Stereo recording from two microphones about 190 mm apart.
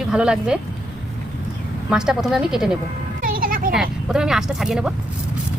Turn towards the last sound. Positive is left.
turn(degrees=-5)  # may be behind; listen again after turning